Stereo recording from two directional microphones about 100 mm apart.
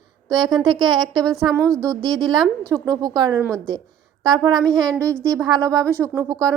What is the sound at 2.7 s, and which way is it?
Speech, 40° right (ahead or behind).